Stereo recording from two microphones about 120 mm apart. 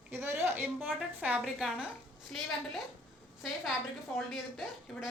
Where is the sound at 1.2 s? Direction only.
10° right (ahead or behind).